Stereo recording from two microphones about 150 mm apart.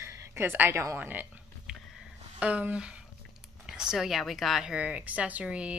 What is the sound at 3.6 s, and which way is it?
A woman's voice, 5° right (ahead or behind).